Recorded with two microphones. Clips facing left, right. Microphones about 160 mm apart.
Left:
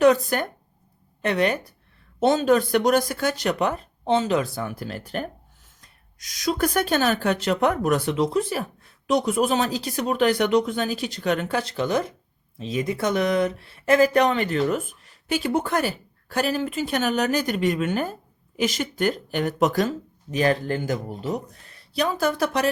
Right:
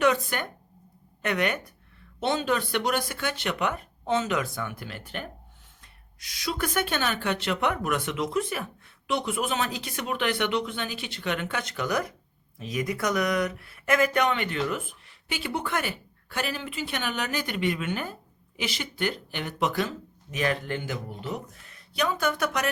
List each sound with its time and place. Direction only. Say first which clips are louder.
0.0 s speech: left 7 dB; 40° left (ahead or behind)